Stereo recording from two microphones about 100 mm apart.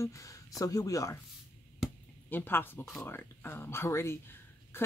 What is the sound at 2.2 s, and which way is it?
Speech, 20° left (ahead or behind).